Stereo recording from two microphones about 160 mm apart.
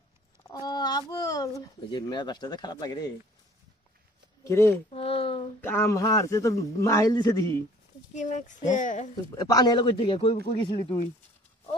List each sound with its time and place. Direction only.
0.5 s a sound: 25° left (ahead or behind)
4.5 s speech: 15° left (ahead or behind)
4.9 s speech: 35° left (ahead or behind)
5.6 s a man's voice: 15° left (ahead or behind)
8.1 s speech: 50° left (ahead or behind)
9.3 s a man's voice: 25° left (ahead or behind)